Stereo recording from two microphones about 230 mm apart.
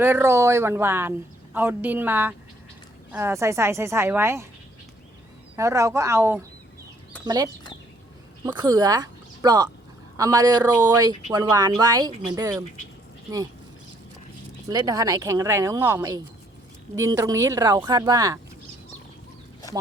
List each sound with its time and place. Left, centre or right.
0.0 s speech: centre
5.5 s speech: centre
14.7 s speech: centre